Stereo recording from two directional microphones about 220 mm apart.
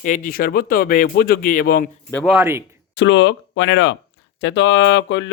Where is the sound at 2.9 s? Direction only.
55° left (ahead or behind).